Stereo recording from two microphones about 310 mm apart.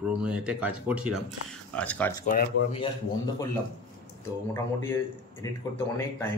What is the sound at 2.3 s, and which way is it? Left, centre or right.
Speech, left.